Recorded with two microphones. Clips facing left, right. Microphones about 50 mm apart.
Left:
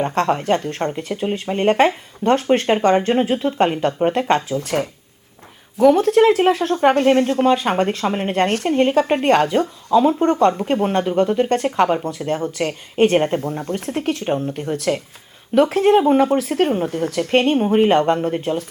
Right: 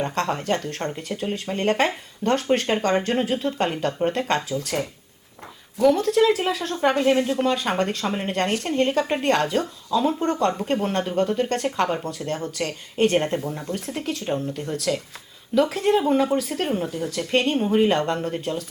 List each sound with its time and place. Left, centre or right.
0.1 s speech: left
13.4 s speech: left